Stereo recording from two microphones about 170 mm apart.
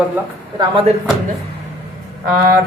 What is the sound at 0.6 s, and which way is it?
Speech, 30° right (ahead or behind).